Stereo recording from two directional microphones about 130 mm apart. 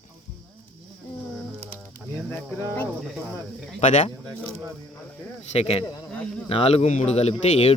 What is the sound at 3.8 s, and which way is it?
Speech, 65° left (ahead or behind).